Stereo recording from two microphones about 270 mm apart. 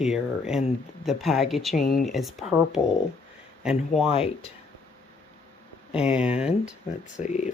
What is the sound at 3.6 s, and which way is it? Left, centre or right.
Speech, centre.